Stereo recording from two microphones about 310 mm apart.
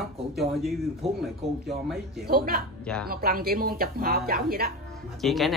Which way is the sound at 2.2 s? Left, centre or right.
Right.